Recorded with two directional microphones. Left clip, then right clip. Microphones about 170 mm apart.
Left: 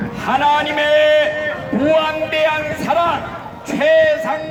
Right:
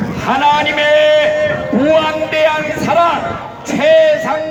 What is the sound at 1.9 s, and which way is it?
A man's voice, 5° left (ahead or behind).